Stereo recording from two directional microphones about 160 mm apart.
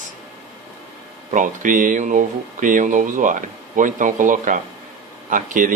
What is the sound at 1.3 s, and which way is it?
Speech, 55° right (ahead or behind).